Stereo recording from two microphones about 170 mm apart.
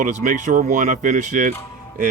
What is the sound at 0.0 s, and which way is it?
Speech, 50° right (ahead or behind).